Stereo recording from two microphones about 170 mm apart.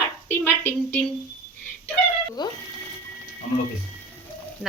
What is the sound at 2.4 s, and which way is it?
Speech, 25° left (ahead or behind).